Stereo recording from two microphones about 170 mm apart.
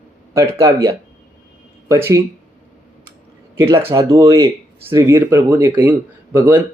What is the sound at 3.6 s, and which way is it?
Speech, 15° right (ahead or behind).